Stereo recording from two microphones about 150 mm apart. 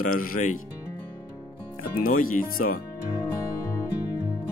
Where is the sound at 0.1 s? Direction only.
65° left (ahead or behind).